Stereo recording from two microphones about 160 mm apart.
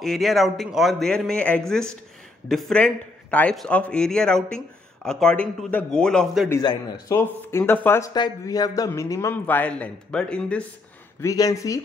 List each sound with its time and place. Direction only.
0.0 s a man's voice: centre (ahead or behind)
6.6 s speech: 25° left (ahead or behind)
7.2 s a man's voice: 15° left (ahead or behind)
8.1 s a man's voice: 25° left (ahead or behind); by 10.6 s 5° left (ahead or behind)
11.1 s speech: 20° left (ahead or behind)